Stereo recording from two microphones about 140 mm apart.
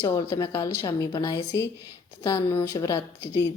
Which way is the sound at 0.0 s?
20° left (ahead or behind).